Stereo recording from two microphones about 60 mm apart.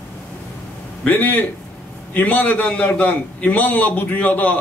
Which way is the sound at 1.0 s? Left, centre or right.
Left.